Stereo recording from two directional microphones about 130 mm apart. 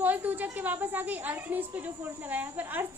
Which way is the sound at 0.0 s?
15° right (ahead or behind).